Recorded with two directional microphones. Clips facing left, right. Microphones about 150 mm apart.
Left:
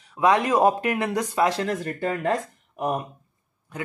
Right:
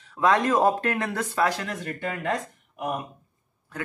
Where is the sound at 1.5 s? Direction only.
30° left (ahead or behind).